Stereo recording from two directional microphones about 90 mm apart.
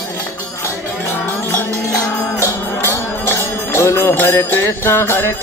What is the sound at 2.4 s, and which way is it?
Music, 25° left (ahead or behind).